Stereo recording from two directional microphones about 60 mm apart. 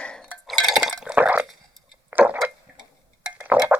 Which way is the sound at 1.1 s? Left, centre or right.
Right.